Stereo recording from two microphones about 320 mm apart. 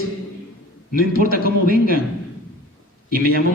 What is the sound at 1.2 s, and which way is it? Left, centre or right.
Speech, right.